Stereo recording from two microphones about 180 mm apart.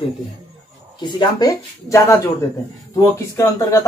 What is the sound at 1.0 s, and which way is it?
Speech, 20° left (ahead or behind).